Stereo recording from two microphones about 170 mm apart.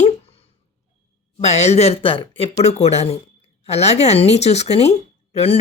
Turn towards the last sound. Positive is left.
turn(degrees=35)  # may be behind; listen again after turning